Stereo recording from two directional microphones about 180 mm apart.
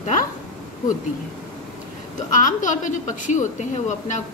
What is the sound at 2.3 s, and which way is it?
A woman's voice, 45° left (ahead or behind).